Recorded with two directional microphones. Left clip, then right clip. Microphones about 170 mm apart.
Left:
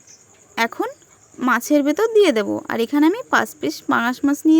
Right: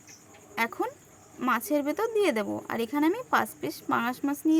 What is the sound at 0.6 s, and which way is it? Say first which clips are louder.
Speech: left 8 dB; 35° left (ahead or behind).